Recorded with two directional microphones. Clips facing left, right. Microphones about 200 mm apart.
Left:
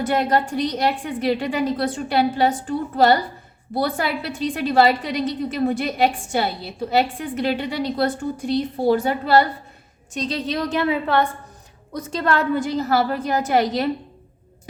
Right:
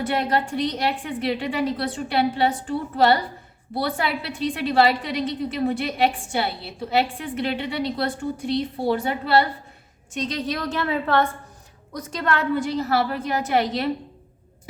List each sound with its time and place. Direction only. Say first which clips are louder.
0.1 s a woman's voice: left 4 dB; 40° left (ahead or behind)
10.2 s a woman's voice: left 2 dB; 30° left (ahead or behind); by 11.3 s 15° left (ahead or behind)
11.9 s a woman's voice: left 3 dB; 30° left (ahead or behind)
12.5 s a woman's voice: left 2 dB; 45° left (ahead or behind)